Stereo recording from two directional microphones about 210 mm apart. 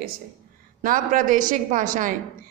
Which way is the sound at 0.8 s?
40° right (ahead or behind).